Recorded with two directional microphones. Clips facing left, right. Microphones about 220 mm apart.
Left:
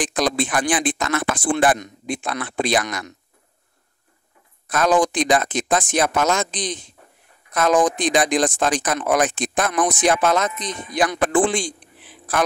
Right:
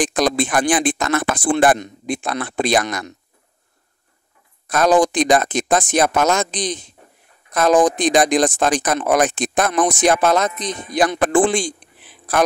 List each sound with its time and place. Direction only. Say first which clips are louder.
0.0 s speech: right 3 dB; 45° right (ahead or behind)
4.6 s speech: right 3 dB; 40° right (ahead or behind)